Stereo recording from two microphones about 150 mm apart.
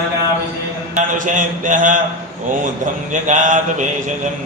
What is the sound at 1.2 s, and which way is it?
Speech, 60° right (ahead or behind).